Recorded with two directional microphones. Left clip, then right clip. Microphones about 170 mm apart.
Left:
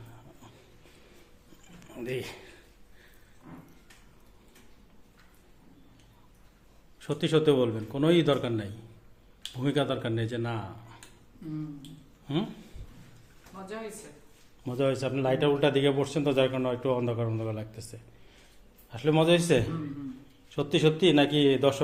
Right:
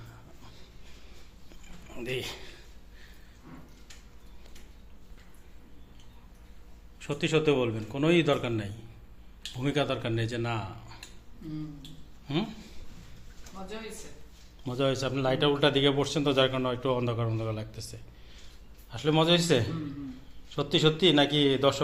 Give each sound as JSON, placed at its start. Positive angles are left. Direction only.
{"t": 1.9, "sound": "a man's voice", "side_deg": 10}
{"t": 7.0, "sound": "a man's voice", "side_deg": 20}
{"t": 12.3, "sound": "a man's voice", "side_deg": 10}
{"t": 14.6, "sound": "a man's voice", "side_deg": 5}